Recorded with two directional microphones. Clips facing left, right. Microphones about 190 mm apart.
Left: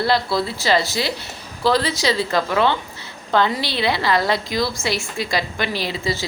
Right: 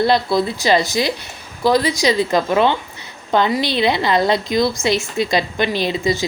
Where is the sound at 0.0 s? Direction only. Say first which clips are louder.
Right 4 dB; 20° right (ahead or behind).